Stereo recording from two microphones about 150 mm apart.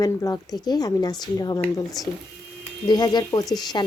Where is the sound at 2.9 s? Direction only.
30° left (ahead or behind).